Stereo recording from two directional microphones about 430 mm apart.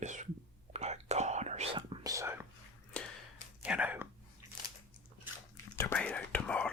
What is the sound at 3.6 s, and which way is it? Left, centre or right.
Whispering, centre.